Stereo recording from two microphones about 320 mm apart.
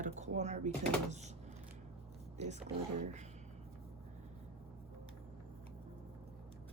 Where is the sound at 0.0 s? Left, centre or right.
Right.